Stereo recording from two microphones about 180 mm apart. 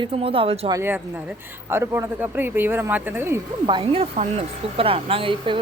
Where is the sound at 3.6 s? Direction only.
30° right (ahead or behind).